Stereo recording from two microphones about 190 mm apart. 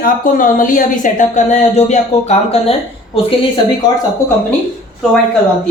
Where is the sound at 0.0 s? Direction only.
45° left (ahead or behind).